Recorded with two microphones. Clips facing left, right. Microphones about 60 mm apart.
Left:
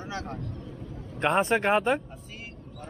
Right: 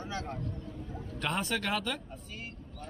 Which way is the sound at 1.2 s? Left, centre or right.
Left.